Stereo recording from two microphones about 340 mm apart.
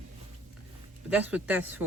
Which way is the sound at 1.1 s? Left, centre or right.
Centre.